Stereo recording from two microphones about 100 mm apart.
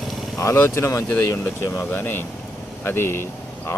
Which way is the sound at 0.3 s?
30° left (ahead or behind).